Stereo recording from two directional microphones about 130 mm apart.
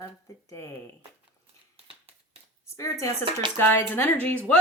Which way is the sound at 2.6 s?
25° left (ahead or behind).